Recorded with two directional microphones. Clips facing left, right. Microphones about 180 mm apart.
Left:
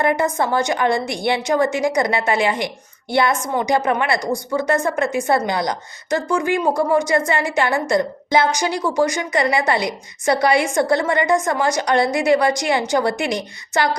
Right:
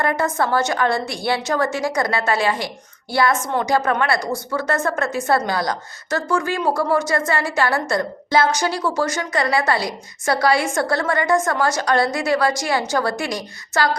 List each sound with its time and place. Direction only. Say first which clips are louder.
0.0 s a woman's voice: left 2 dB; 15° left (ahead or behind)